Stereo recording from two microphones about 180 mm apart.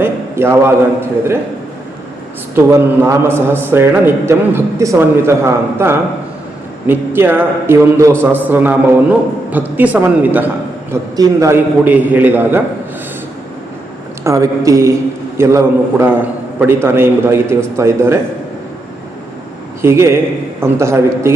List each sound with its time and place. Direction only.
0.0 s a man's voice: 10° right (ahead or behind)
2.7 s a man's voice: 15° right (ahead or behind)
14.3 s a man's voice: 15° right (ahead or behind)
19.8 s a man's voice: 15° right (ahead or behind)